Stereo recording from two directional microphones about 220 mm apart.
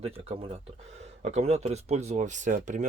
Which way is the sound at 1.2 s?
30° right (ahead or behind).